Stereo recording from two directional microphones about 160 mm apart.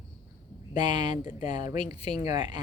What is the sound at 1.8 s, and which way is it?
Speech, 45° left (ahead or behind).